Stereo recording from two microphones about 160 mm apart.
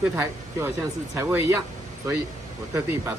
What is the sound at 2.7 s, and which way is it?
Speech, 15° right (ahead or behind).